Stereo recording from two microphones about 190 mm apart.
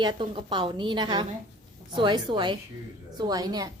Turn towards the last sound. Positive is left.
turn(degrees=-20)  # may be behind; listen again after turning